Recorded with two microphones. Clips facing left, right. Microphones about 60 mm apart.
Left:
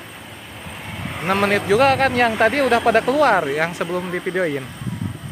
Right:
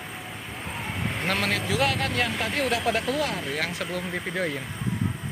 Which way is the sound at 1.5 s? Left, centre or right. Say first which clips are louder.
Left 13 dB; left.